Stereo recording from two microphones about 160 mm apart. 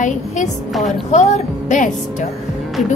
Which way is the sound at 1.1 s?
45° left (ahead or behind).